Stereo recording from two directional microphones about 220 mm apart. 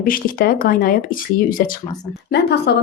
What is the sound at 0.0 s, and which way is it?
A woman's voice, 40° left (ahead or behind).